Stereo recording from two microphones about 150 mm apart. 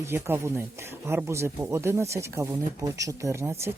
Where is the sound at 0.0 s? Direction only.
15° right (ahead or behind).